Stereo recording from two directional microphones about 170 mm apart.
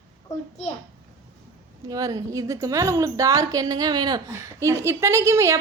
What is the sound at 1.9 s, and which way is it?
A woman's voice, 20° right (ahead or behind).